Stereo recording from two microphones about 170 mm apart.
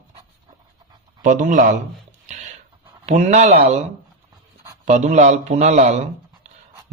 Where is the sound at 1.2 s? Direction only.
50° right (ahead or behind).